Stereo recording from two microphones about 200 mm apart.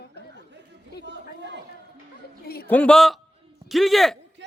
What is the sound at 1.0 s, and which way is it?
Chatter, 60° right (ahead or behind).